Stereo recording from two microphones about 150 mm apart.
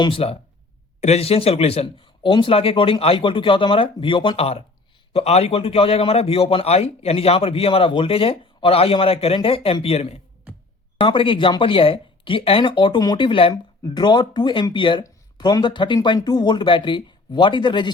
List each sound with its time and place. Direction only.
0.0 s a man's voice: 40° left (ahead or behind)